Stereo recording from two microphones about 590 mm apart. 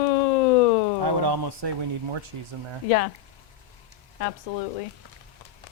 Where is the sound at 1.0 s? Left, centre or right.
Right.